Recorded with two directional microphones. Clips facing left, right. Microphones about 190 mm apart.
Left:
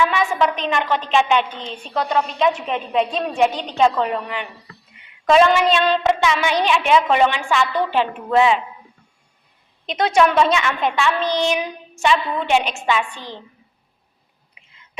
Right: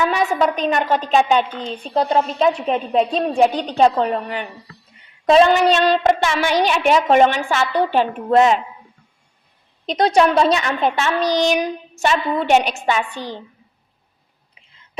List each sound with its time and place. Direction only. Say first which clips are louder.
0.0 s speech: right 1 dB; 40° right (ahead or behind)
4.9 s a sound: right 2 dB; 35° right (ahead or behind)
5.7 s a woman's voice: right 2 dB; 40° right (ahead or behind)
9.8 s speech: right 2 dB; 35° right (ahead or behind)
14.6 s whispering: even; 30° right (ahead or behind)